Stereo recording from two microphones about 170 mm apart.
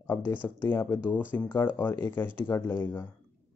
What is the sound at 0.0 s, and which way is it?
Speech, 10° left (ahead or behind).